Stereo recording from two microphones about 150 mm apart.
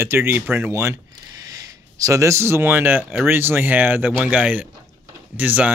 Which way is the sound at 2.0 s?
20° right (ahead or behind).